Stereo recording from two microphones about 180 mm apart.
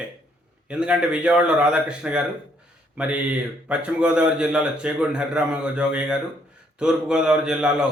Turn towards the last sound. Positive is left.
turn(degrees=-5)  # may be behind; listen again after turning